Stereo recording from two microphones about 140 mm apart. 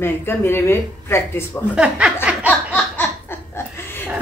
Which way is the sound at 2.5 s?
15° left (ahead or behind).